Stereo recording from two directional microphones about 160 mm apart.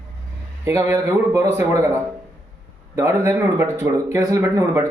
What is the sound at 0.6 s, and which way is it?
A man's voice, 20° right (ahead or behind).